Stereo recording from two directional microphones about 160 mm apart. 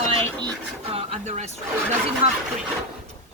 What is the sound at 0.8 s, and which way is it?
Speech, 40° right (ahead or behind).